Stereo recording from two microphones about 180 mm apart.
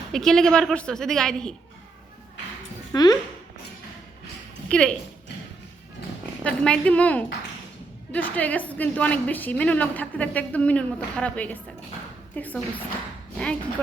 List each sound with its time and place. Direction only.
0.1 s a woman's voice: centre (ahead or behind)
2.9 s speech: 20° left (ahead or behind)
4.7 s a woman's voice: 5° left (ahead or behind)
6.4 s a woman's voice: 5° left (ahead or behind)